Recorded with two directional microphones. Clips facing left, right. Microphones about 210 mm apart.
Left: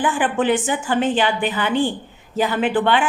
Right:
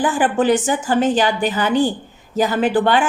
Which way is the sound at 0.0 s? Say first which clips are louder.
Right 3 dB; 40° right (ahead or behind).